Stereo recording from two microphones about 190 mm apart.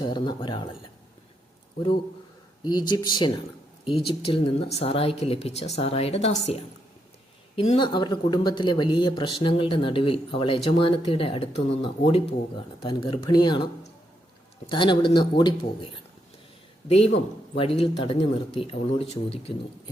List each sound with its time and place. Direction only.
0.0 s speech: 25° left (ahead or behind)
2.6 s speech: 20° left (ahead or behind)
14.7 s speech: 25° left (ahead or behind)
17.6 s speech: 30° left (ahead or behind)